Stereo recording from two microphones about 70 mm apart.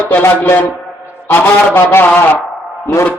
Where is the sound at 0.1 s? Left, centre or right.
Left.